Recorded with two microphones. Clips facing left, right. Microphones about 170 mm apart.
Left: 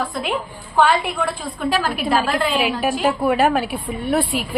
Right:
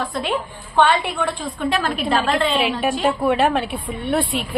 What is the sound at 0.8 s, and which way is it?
A woman's voice, 5° left (ahead or behind).